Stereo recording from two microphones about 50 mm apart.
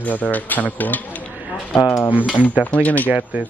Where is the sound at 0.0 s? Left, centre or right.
Left.